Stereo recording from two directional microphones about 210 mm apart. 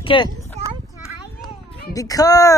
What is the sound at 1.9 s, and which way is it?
Speech, 15° left (ahead or behind).